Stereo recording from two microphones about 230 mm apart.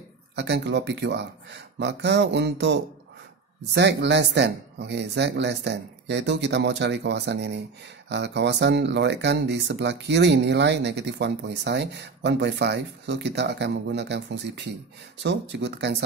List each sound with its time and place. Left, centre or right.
0.4 s speech: right